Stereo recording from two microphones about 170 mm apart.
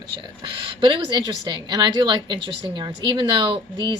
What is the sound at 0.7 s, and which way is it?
A woman's voice, 30° right (ahead or behind).